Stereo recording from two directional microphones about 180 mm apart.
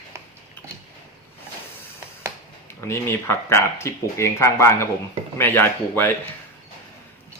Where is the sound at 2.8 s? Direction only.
15° left (ahead or behind).